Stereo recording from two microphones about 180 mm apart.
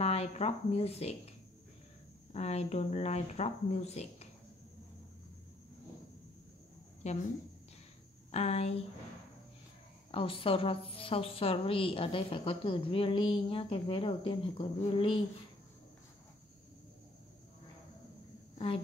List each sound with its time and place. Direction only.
0.0 s a woman's voice: 35° left (ahead or behind)
2.3 s a woman's voice: 40° left (ahead or behind)
7.0 s a woman's voice: 40° left (ahead or behind)
8.3 s a woman's voice: 35° left (ahead or behind)
10.1 s a woman's voice: 30° left (ahead or behind)